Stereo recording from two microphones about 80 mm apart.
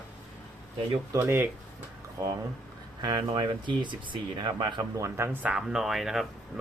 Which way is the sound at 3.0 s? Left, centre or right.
Right.